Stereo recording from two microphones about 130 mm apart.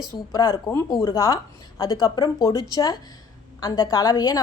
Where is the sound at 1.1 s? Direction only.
25° left (ahead or behind).